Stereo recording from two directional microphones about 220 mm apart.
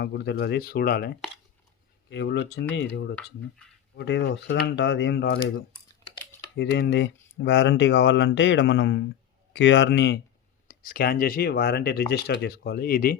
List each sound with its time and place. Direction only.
0.0 s speech: 45° left (ahead or behind)
6.6 s speech: 50° left (ahead or behind)